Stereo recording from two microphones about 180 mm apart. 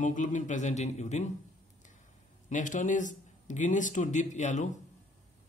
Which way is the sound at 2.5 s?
45° left (ahead or behind).